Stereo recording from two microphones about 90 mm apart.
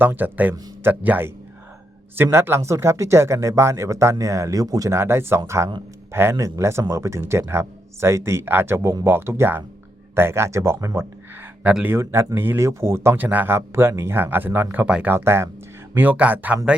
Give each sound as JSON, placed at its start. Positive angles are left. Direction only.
{"t": 0.0, "sound": "speech", "side_deg": -20}
{"t": 4.9, "sound": "speech", "side_deg": -25}
{"t": 11.6, "sound": "speech", "side_deg": -15}
{"t": 11.9, "sound": "speech", "side_deg": -25}
{"t": 14.8, "sound": "speech", "side_deg": -10}
{"t": 15.1, "sound": "speech", "side_deg": -25}